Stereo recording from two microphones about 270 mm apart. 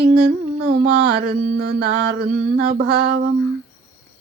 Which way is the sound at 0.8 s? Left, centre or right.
Right.